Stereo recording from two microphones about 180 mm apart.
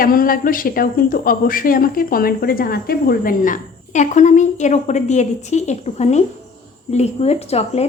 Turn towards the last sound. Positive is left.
turn(degrees=35)  # may be behind; listen again after turning